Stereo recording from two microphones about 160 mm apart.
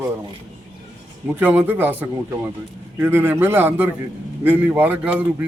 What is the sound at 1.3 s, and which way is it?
A man's voice, 10° right (ahead or behind).